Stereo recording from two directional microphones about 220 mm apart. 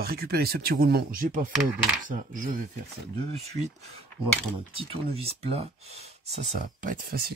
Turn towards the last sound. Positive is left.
turn(degrees=-45)  # may be behind; listen again after turning